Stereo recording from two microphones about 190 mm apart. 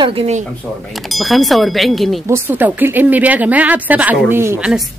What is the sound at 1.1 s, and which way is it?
Speech, centre (ahead or behind).